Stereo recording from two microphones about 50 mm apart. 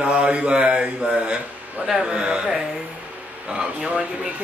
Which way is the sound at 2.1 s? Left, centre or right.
Centre.